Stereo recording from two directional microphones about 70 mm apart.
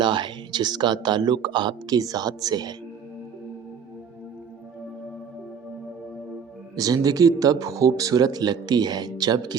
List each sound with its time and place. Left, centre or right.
0.0 s speech: right
6.7 s speech: right